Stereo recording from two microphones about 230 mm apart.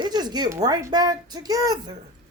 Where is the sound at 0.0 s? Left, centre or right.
Centre.